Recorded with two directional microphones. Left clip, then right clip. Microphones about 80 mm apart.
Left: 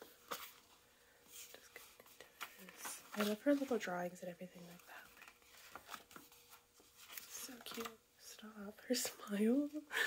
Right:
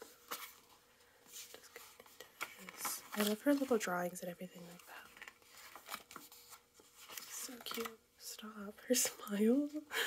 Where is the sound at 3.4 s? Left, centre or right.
Right.